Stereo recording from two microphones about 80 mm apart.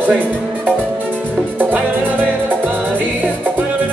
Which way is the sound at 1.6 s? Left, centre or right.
Right.